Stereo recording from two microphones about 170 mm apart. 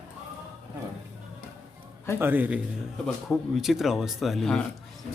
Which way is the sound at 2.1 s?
10° right (ahead or behind).